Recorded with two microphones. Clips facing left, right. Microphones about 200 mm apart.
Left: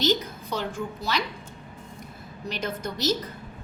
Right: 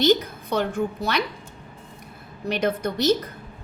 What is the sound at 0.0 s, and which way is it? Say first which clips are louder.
A woman's voice: right 5 dB; 55° right (ahead or behind).